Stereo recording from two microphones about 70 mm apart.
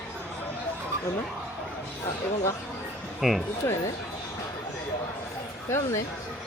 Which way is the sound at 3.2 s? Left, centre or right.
Centre.